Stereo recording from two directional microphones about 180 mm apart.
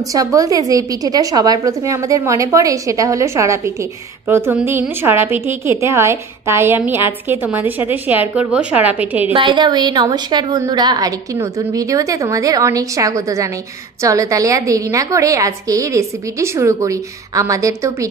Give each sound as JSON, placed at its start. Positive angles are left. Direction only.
{"t": 0.1, "sound": "a woman's voice", "side_deg": -20}
{"t": 9.3, "sound": "a woman's voice", "side_deg": -25}